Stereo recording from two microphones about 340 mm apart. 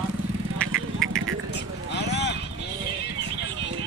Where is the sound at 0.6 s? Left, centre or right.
Centre.